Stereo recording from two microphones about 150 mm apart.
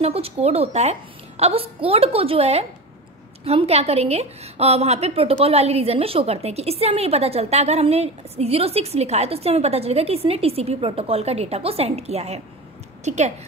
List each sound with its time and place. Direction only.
0.0 s a woman's voice: 40° right (ahead or behind)